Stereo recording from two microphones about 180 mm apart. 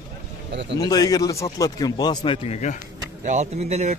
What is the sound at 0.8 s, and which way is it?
A man's voice, 20° left (ahead or behind).